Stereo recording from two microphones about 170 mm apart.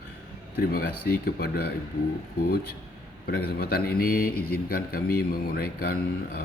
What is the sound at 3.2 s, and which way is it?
Speech, 65° left (ahead or behind).